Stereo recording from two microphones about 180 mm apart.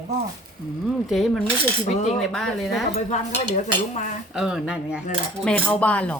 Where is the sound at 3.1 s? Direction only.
40° left (ahead or behind).